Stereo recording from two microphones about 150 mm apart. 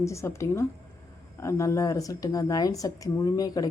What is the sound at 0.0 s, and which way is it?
Speech, 20° left (ahead or behind).